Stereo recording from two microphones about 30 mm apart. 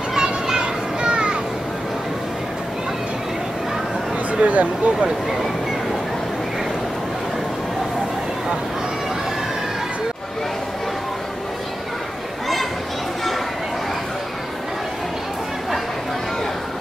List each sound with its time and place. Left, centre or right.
0.1 s children playing: centre
0.6 s children playing: right
4.3 s speech: right